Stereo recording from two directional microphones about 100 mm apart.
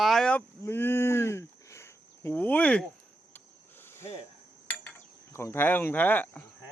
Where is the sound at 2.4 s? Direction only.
15° left (ahead or behind).